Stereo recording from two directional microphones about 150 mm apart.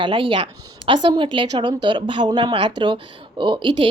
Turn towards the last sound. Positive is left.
turn(degrees=-35)  # may be behind; listen again after turning